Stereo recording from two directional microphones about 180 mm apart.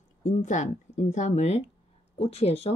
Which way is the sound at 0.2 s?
45° left (ahead or behind).